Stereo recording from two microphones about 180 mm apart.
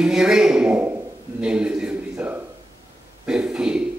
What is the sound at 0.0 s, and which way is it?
A man's voice, 5° right (ahead or behind).